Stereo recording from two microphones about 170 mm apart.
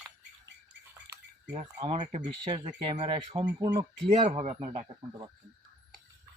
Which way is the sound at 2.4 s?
25° right (ahead or behind).